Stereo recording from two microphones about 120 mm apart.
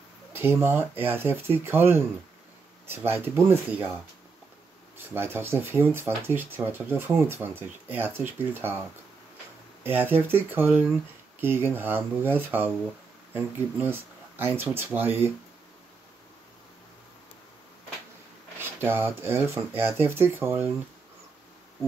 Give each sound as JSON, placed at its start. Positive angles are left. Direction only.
{"t": 0.3, "sound": "speech", "side_deg": -20}
{"t": 4.9, "sound": "speech", "side_deg": -20}
{"t": 9.8, "sound": "speech", "side_deg": -15}
{"t": 18.6, "sound": "speech", "side_deg": -20}